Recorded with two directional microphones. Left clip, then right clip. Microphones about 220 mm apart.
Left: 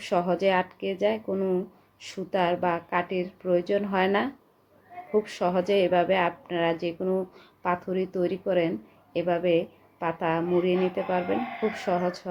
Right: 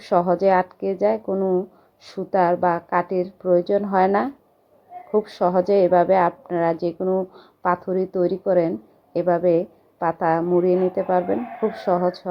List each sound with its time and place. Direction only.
0.1 s a woman's voice: 15° right (ahead or behind)
4.0 s speech: 5° right (ahead or behind)
5.1 s a woman's voice: 15° right (ahead or behind)